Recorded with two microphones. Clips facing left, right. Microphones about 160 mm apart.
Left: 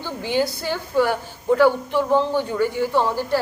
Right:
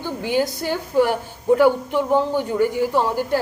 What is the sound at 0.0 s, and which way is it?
A woman's voice, 15° right (ahead or behind).